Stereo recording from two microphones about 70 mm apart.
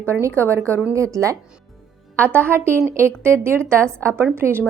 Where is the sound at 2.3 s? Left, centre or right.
Right.